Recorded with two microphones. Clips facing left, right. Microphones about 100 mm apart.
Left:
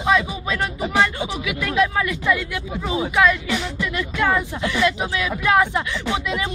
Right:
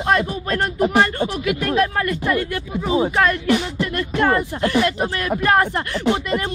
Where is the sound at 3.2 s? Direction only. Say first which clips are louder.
Right 1 dB; 50° right (ahead or behind).